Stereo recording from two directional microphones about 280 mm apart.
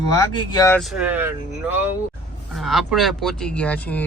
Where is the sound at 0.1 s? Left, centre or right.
Centre.